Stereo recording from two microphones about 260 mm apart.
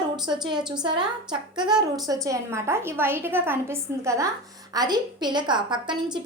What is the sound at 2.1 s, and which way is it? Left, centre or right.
A woman's voice, centre.